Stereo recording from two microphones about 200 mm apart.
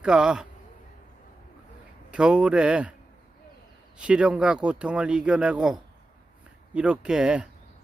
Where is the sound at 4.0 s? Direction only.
5° right (ahead or behind).